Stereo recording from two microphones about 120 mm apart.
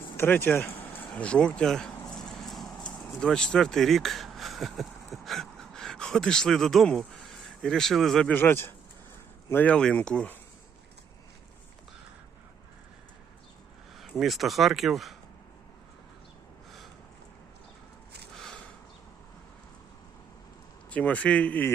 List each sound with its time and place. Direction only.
0.2 s speech: 15° left (ahead or behind)
2.0 s vehicle: 5° left (ahead or behind)
9.5 s speech: 10° left (ahead or behind)
13.9 s speech: centre (ahead or behind)
18.3 s a sound: 5° left (ahead or behind)
20.9 s speech: 10° left (ahead or behind)